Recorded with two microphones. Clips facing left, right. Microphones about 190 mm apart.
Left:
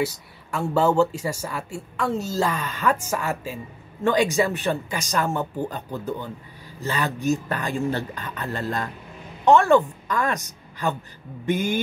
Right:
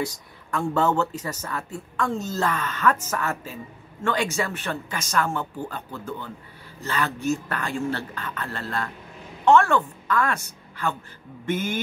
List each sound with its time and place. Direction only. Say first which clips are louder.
0.0 s a woman's voice: left 4 dB; 5° left (ahead or behind)